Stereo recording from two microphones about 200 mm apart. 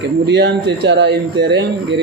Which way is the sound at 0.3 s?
60° right (ahead or behind).